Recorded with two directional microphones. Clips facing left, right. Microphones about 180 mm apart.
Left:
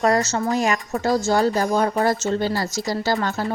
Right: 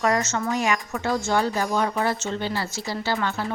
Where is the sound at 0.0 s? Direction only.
35° left (ahead or behind).